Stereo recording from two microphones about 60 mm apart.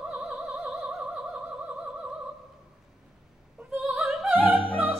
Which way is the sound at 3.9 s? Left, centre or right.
Centre.